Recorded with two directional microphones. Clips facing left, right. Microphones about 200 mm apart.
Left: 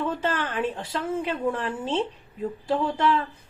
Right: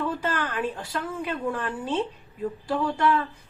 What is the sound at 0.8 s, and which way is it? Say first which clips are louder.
A woman's voice: left 3 dB; 25° left (ahead or behind).